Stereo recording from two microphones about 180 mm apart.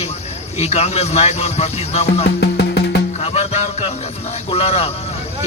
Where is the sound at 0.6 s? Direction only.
35° left (ahead or behind).